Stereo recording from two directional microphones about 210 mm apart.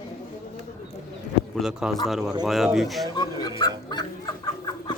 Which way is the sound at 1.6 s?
Centre (ahead or behind).